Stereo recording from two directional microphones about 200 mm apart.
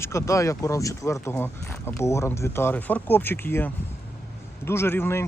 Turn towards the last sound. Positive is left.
turn(degrees=10)  # may be behind; listen again after turning